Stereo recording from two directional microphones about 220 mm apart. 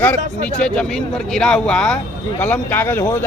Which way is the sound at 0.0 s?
5° left (ahead or behind).